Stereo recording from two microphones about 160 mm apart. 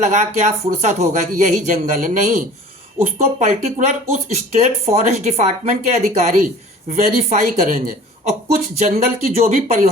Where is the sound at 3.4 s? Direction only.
50° right (ahead or behind).